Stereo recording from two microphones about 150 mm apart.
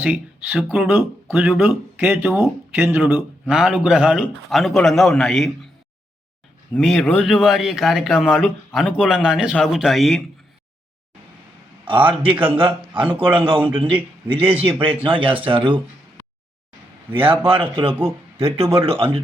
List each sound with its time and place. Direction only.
0.0 s a man's voice: 10° right (ahead or behind)
6.7 s a man's voice: centre (ahead or behind)
11.9 s speech: 35° right (ahead or behind)
17.4 s speech: 35° right (ahead or behind)